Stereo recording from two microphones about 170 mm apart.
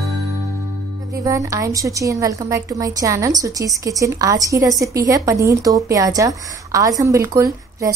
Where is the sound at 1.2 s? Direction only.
20° right (ahead or behind).